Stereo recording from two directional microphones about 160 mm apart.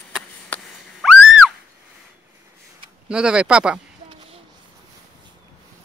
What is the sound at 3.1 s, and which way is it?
Speech, 5° right (ahead or behind).